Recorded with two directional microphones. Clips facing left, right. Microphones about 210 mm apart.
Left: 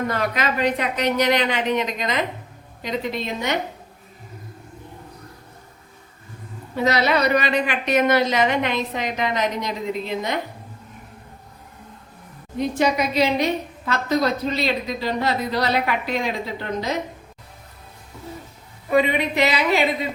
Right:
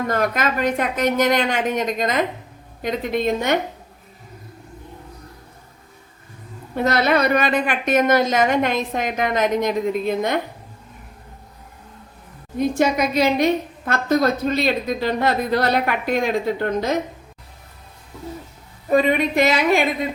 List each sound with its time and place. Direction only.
0.1 s a woman's voice: 45° right (ahead or behind)
6.7 s a woman's voice: 50° right (ahead or behind)
12.5 s a woman's voice: 50° right (ahead or behind)
18.9 s a woman's voice: 45° right (ahead or behind)